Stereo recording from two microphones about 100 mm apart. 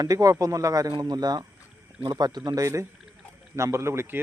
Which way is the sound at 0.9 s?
45° right (ahead or behind).